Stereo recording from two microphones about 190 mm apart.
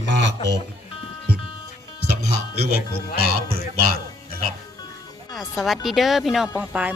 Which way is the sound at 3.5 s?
50° right (ahead or behind).